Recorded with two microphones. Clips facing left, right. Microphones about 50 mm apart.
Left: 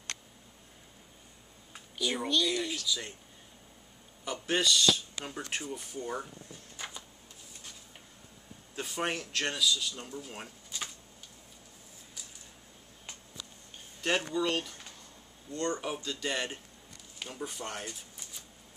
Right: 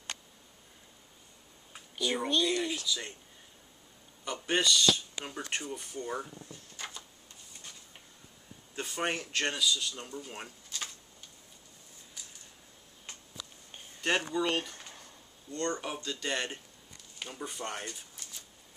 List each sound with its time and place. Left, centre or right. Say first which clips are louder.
1.7 s a sound: right 1 dB; centre
2.2 s speech: right 1 dB; centre
4.5 s speech: even; centre
8.7 s speech: even; centre
10.7 s a sound: even; centre
14.0 s speech: even; centre
15.5 s speech: left 1 dB; centre